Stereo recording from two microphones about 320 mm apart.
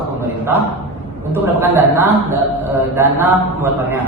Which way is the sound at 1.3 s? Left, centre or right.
Centre.